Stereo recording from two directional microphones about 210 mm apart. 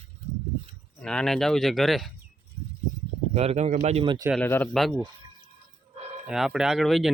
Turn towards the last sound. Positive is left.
turn(degrees=0)  # may be behind; listen again after turning